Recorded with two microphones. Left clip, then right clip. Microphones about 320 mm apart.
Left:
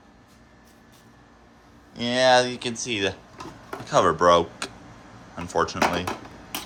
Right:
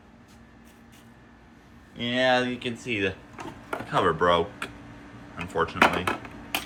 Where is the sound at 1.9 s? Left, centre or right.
Left.